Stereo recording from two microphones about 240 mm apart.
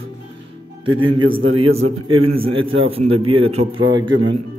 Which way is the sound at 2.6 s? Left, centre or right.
Right.